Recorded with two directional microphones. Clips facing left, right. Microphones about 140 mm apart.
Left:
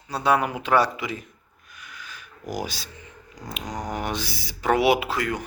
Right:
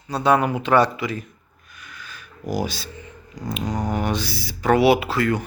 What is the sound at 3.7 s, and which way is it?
Music, 25° right (ahead or behind).